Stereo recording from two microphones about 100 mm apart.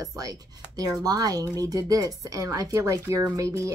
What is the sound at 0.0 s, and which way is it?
Speech, 35° right (ahead or behind).